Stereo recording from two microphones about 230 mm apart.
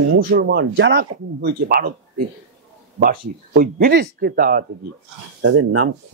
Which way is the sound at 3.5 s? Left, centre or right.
Right.